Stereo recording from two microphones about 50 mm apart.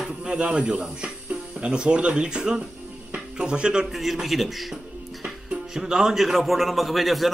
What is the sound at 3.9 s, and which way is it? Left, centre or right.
Speech, centre.